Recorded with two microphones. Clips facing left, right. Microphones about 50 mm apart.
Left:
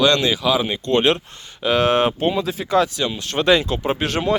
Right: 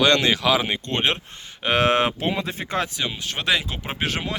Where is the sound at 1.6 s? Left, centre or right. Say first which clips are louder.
Left 3 dB; right.